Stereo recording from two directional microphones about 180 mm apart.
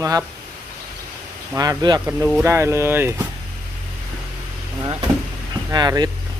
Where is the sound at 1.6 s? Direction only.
20° right (ahead or behind).